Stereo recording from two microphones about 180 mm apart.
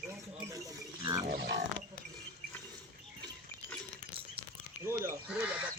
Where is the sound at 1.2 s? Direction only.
65° right (ahead or behind).